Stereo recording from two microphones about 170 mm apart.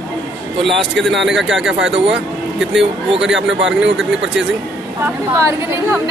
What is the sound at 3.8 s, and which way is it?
Speech, 5° right (ahead or behind).